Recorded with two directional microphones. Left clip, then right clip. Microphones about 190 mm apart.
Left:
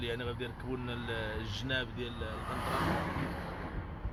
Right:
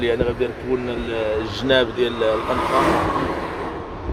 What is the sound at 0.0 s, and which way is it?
Speech, 5° right (ahead or behind).